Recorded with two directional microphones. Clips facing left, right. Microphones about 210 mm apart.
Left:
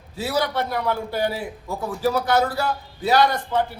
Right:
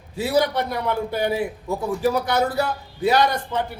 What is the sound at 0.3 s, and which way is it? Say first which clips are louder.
A man's voice: right 3 dB; 20° right (ahead or behind).